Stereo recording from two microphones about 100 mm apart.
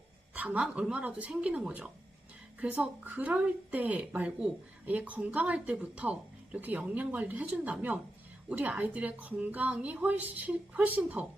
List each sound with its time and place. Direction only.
0.3 s a woman's voice: 10° right (ahead or behind)